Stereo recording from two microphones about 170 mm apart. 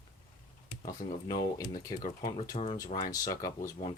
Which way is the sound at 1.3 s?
20° left (ahead or behind).